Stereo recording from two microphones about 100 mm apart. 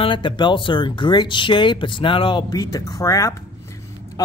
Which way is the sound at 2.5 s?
35° left (ahead or behind).